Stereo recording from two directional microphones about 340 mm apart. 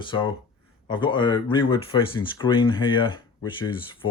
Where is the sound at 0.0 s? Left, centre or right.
Centre.